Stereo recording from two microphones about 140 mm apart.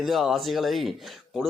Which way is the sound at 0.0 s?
Centre (ahead or behind).